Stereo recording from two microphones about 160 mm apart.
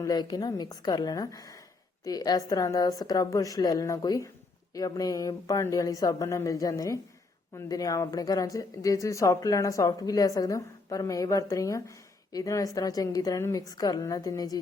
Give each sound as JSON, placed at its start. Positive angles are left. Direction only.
{"t": 0.0, "sound": "speech", "side_deg": 25}